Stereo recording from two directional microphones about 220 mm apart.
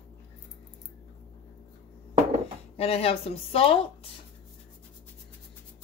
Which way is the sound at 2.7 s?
25° left (ahead or behind).